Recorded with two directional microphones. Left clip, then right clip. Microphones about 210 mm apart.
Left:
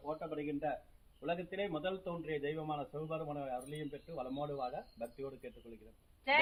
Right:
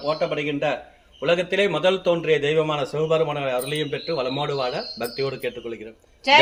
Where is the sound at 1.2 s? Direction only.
60° right (ahead or behind).